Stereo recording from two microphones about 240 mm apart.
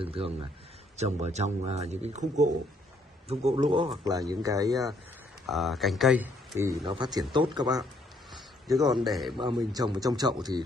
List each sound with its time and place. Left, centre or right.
0.0 s a man's voice: right
5.5 s speech: centre
6.6 s speech: centre
8.9 s speech: centre
9.4 s speech: centre